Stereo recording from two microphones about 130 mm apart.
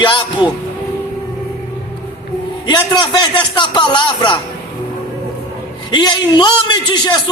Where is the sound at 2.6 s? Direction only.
35° left (ahead or behind).